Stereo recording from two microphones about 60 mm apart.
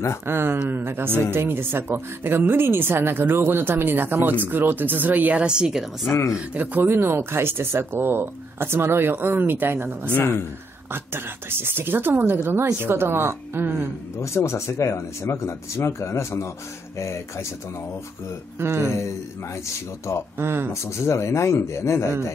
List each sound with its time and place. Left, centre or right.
0.3 s speech: right; by 6.1 s centre
6.5 s speech: right
14.1 s speech: left
18.6 s speech: right
20.3 s speech: right
20.8 s speech: left